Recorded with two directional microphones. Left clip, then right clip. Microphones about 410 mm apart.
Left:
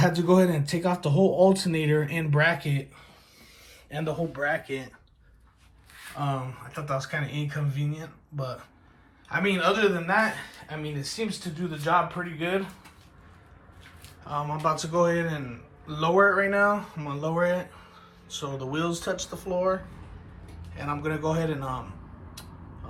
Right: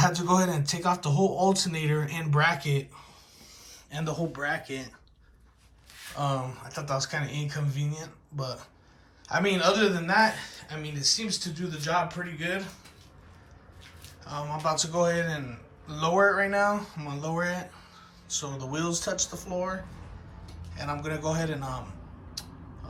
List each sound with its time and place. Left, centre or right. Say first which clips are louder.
0.1 s a man's voice: left 3 dB; centre
1.9 s speech: left 4 dB; right
3.7 s a man's voice: left 3 dB; centre
6.1 s a man's voice: right 1 dB; centre
14.0 s a man's voice: left 5 dB; centre